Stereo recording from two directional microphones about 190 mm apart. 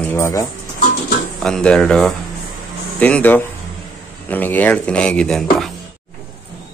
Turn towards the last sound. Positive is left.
turn(degrees=0)  # may be behind; listen again after turning